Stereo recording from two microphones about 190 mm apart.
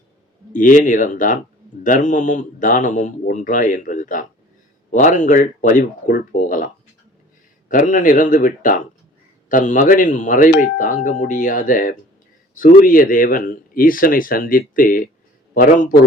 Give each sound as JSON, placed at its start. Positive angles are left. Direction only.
{"t": 0.5, "sound": "speech", "side_deg": 40}
{"t": 7.7, "sound": "speech", "side_deg": 45}